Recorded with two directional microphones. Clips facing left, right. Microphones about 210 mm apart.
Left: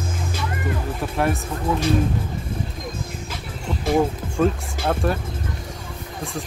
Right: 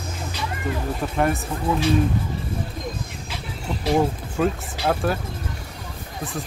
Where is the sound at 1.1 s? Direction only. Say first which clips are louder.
Even; centre (ahead or behind).